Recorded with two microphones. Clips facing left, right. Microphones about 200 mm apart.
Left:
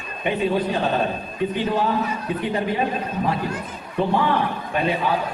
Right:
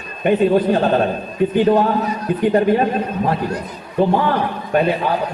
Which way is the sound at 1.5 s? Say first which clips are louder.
Right 8 dB; 45° right (ahead or behind).